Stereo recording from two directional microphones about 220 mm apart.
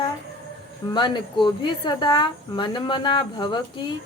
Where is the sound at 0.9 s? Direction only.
20° left (ahead or behind).